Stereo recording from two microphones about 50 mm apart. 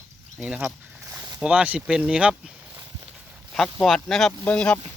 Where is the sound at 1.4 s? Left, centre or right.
Centre.